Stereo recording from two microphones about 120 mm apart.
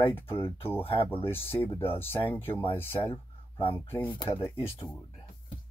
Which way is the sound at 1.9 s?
20° left (ahead or behind).